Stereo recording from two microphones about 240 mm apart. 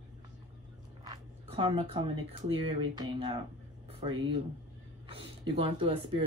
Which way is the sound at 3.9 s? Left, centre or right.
Right.